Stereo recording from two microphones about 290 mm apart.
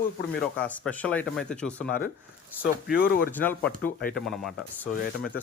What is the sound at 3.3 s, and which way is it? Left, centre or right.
Speech, centre.